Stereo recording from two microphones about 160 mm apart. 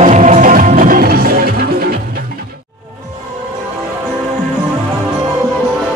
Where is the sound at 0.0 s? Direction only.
50° right (ahead or behind); by 1.9 s 65° right (ahead or behind).